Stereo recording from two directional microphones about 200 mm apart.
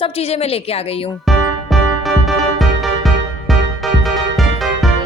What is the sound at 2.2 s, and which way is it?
Music, centre (ahead or behind).